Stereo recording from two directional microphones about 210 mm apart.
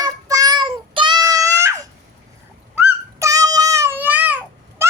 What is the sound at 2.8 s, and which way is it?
Child singing, 15° right (ahead or behind).